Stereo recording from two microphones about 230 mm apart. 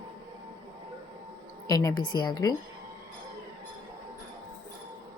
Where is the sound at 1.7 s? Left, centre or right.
Centre.